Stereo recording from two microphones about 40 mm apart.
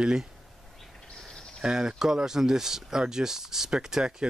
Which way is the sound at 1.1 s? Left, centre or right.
Centre.